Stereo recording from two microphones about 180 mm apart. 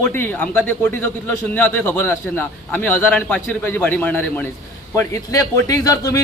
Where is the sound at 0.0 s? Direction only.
10° left (ahead or behind).